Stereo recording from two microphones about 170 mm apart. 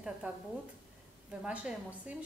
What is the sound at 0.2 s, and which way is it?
Speech, 10° right (ahead or behind).